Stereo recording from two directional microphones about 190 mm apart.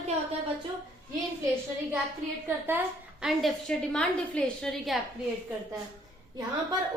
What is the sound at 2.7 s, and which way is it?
A woman's voice, 5° right (ahead or behind).